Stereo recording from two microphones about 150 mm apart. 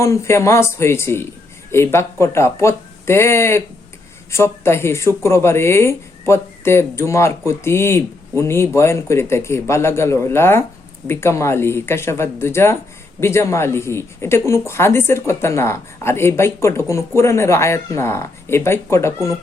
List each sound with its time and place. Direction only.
0.0 s speech: 20° left (ahead or behind)